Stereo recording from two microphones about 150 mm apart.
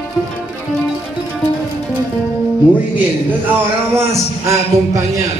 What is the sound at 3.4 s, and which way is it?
A man's voice, 15° right (ahead or behind).